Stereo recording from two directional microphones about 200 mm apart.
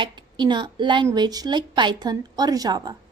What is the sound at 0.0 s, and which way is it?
A woman's voice, 20° right (ahead or behind).